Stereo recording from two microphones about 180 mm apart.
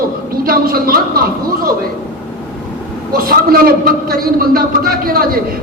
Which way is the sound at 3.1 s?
55° right (ahead or behind).